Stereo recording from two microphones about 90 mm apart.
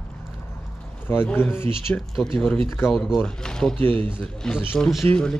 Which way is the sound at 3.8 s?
20° left (ahead or behind).